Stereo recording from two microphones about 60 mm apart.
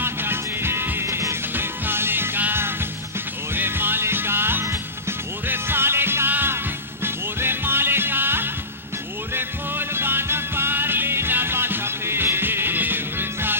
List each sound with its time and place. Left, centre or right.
0.0 s music: right